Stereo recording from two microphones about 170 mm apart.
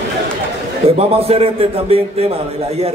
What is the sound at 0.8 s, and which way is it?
A man's voice, 35° right (ahead or behind).